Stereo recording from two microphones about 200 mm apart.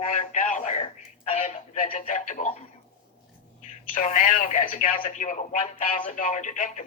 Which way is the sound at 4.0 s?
40° left (ahead or behind).